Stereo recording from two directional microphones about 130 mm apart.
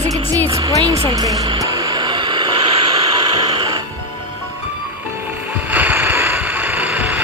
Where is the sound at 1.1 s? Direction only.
30° right (ahead or behind).